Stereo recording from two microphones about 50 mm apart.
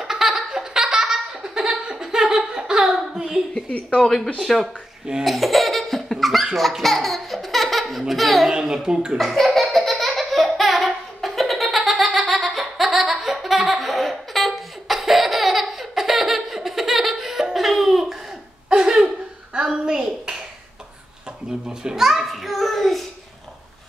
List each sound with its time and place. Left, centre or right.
0.0 s laughter: centre
2.7 s a sound: centre
4.0 s speech: centre
5.2 s laughter: centre
8.1 s a child's voice: centre
9.2 s laughter: centre
18.7 s a sound: centre
19.8 s clapping: centre
21.6 s a sound: centre